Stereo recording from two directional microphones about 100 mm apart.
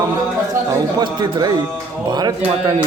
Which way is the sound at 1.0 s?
45° right (ahead or behind).